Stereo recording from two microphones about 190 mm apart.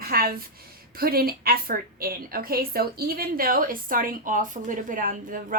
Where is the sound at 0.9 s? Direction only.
50° right (ahead or behind).